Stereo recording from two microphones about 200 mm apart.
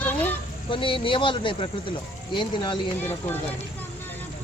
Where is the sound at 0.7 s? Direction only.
25° left (ahead or behind).